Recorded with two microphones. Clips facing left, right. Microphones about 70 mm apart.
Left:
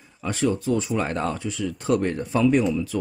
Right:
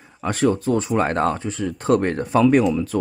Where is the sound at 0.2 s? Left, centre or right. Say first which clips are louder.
Right 4 dB; right.